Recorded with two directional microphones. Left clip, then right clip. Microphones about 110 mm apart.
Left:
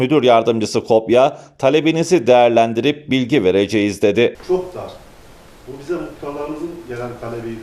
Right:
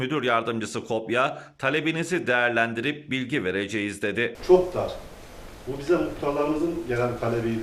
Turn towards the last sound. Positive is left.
turn(degrees=5)  # may be behind; listen again after turning